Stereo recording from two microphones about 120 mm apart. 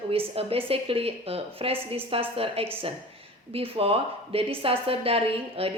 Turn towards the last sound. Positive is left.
turn(degrees=-50)  # may be behind; listen again after turning